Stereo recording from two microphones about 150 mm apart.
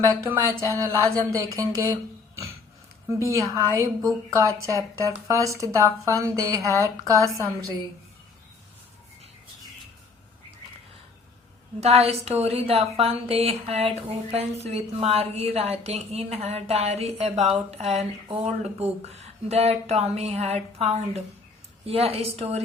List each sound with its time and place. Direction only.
0.1 s a woman's voice: 20° right (ahead or behind)
3.1 s a woman's voice: 20° right (ahead or behind)
11.8 s a woman's voice: 45° right (ahead or behind)